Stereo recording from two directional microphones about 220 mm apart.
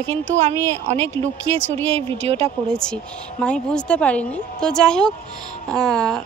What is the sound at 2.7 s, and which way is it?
A woman's voice, 5° left (ahead or behind).